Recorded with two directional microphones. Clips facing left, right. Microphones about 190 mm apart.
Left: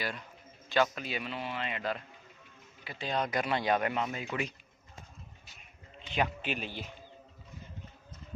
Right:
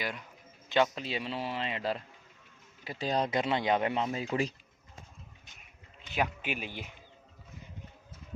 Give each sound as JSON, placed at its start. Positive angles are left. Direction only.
{"t": 0.0, "sound": "a man's voice", "side_deg": -15}
{"t": 3.2, "sound": "speech", "side_deg": -25}
{"t": 6.1, "sound": "a man's voice", "side_deg": -10}